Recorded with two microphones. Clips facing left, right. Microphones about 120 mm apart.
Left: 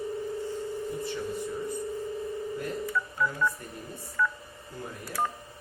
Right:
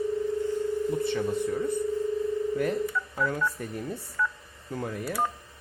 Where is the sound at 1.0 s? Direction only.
70° right (ahead or behind).